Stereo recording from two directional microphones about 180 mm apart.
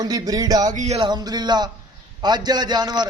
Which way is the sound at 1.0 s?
20° right (ahead or behind).